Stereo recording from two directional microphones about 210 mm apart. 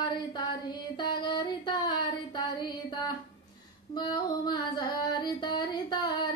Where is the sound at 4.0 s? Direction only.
20° left (ahead or behind).